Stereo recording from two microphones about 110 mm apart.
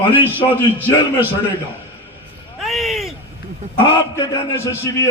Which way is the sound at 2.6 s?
Centre (ahead or behind).